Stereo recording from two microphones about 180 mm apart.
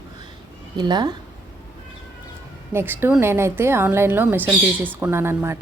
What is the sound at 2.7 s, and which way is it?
A woman's voice, 10° right (ahead or behind).